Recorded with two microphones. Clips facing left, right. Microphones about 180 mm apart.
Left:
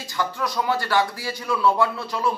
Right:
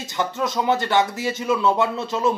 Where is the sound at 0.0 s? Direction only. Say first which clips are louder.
Right 2 dB; 20° right (ahead or behind).